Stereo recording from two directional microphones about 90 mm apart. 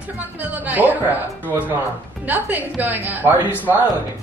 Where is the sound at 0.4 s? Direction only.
20° right (ahead or behind).